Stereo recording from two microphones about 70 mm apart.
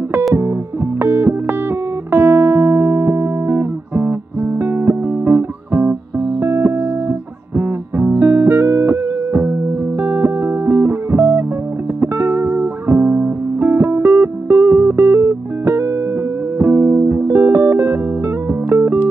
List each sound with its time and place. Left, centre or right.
0.3 s music: right